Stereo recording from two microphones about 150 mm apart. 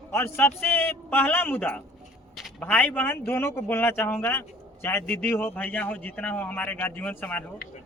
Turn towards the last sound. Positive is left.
turn(degrees=10)  # may be behind; listen again after turning